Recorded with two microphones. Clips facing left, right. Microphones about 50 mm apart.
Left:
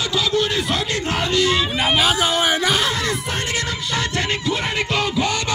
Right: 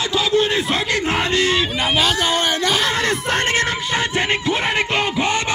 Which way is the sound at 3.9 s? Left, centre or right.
Right.